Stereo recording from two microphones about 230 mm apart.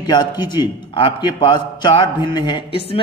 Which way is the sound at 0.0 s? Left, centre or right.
Centre.